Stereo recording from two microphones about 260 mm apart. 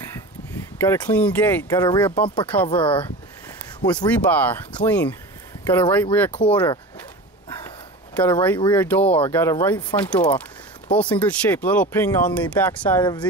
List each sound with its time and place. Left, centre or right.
0.7 s speech: centre
2.4 s speech: centre
2.7 s speech: centre
4.0 s speech: centre
8.2 s speech: centre